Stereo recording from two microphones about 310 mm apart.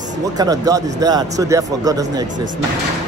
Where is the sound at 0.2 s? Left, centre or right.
Centre.